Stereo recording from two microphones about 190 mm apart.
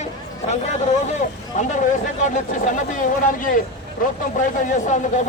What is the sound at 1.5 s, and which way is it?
A man's voice, 40° left (ahead or behind).